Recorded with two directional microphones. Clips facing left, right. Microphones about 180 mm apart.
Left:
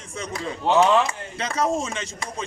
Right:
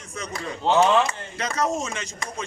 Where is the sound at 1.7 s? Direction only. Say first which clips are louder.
Left 2 dB; 30° left (ahead or behind).